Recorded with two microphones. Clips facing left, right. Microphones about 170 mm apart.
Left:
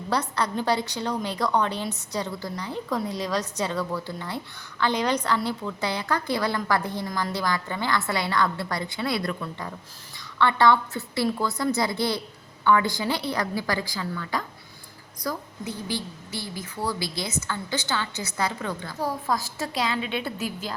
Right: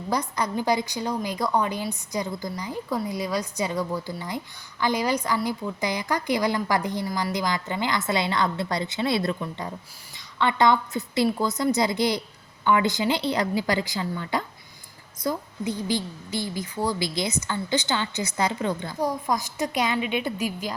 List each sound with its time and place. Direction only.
0.1 s a woman's voice: 10° right (ahead or behind)